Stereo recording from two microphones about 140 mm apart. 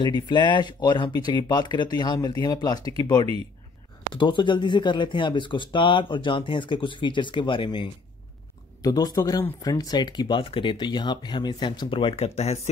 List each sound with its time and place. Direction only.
0.3 s speech: 35° left (ahead or behind)
8.8 s speech: 25° left (ahead or behind); by 12.5 s 50° left (ahead or behind)